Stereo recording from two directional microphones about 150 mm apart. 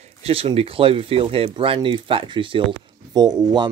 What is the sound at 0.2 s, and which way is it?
Speech, 40° right (ahead or behind).